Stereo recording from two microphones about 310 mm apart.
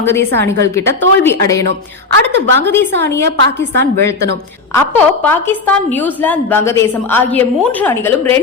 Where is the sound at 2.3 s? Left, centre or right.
Right.